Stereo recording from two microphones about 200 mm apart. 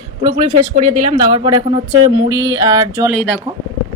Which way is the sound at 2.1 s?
15° right (ahead or behind).